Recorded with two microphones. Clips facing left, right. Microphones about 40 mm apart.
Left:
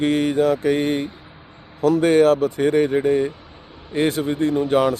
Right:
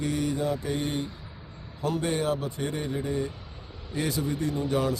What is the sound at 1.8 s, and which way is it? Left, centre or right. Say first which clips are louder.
Speech: left 13 dB; left.